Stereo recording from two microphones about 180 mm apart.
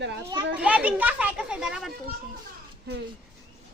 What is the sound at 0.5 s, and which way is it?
Speech, 5° right (ahead or behind).